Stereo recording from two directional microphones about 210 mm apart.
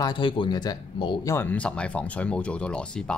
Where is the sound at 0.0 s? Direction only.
20° left (ahead or behind).